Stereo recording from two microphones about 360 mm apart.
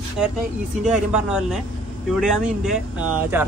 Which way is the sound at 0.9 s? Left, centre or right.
Centre.